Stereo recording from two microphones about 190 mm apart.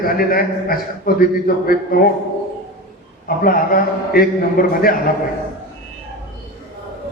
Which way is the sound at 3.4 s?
50° left (ahead or behind).